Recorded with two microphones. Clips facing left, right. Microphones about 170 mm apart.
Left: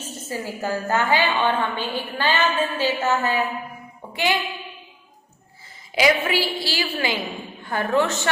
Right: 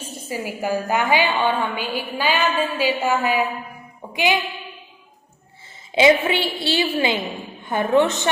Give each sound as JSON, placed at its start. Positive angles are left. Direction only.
{"t": 0.0, "sound": "a woman's voice", "side_deg": -10}
{"t": 5.9, "sound": "a woman's voice", "side_deg": -25}